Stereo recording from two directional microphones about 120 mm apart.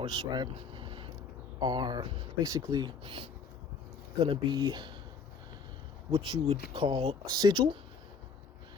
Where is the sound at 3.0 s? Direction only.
50° right (ahead or behind).